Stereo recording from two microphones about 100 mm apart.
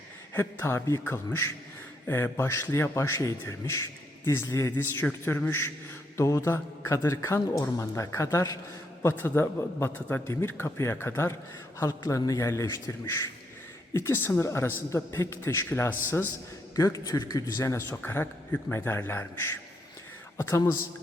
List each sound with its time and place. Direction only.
0.3 s a man's voice: 25° left (ahead or behind)